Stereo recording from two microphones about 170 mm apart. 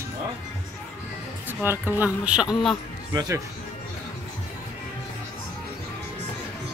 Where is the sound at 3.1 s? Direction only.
20° right (ahead or behind).